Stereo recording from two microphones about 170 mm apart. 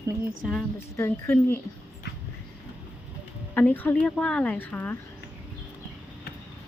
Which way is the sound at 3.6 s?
10° left (ahead or behind).